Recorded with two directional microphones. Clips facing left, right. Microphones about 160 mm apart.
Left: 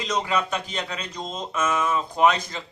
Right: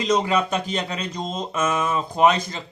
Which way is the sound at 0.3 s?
30° right (ahead or behind).